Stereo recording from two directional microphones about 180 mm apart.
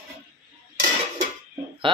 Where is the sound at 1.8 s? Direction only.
30° right (ahead or behind).